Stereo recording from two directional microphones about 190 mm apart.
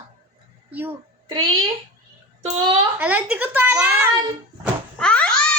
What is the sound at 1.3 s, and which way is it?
Speech, 20° right (ahead or behind).